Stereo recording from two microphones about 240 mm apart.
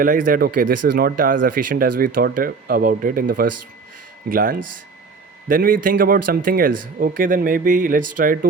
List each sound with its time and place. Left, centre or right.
0.0 s speech: right